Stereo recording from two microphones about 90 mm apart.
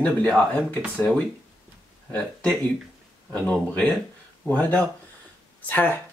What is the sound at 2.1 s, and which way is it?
Speech, 15° left (ahead or behind).